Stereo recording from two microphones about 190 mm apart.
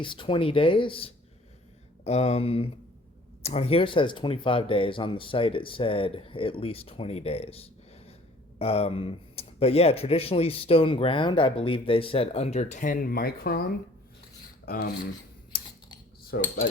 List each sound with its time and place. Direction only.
0.0 s speech: 25° left (ahead or behind); by 14.9 s 55° left (ahead or behind)
16.3 s cutlery: 50° left (ahead or behind)